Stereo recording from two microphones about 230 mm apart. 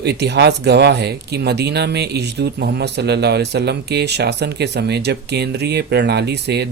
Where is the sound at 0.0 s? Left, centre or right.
Right.